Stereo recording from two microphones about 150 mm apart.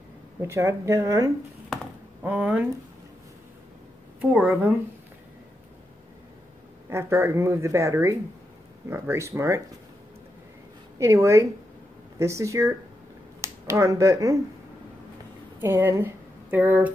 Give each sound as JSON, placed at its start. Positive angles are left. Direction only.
{"t": 0.4, "sound": "speech", "side_deg": -20}
{"t": 4.2, "sound": "speech", "side_deg": -10}
{"t": 6.9, "sound": "speech", "side_deg": -15}
{"t": 11.0, "sound": "speech", "side_deg": -20}
{"t": 15.6, "sound": "speech", "side_deg": -15}